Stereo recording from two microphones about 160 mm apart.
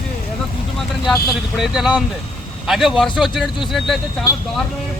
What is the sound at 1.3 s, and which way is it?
Speech, centre (ahead or behind).